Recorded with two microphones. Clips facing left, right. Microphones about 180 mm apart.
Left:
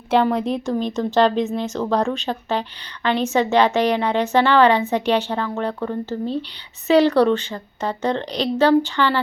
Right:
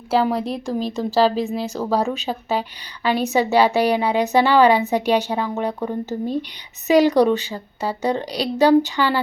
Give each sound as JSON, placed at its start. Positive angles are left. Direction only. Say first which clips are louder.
{"t": 0.1, "sound": "a woman's voice", "louder": "left 1 dB", "side_deg": -5}